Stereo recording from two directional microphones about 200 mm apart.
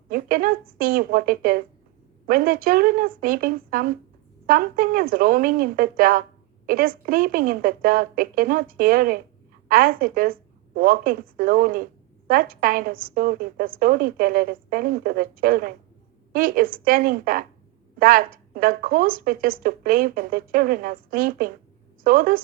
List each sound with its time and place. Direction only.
0.1 s a woman's voice: 45° right (ahead or behind)